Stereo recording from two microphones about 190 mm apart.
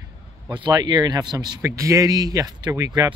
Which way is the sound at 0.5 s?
25° right (ahead or behind).